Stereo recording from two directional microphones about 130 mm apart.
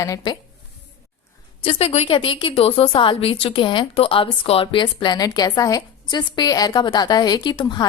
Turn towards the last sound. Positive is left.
turn(degrees=35)  # may be behind; listen again after turning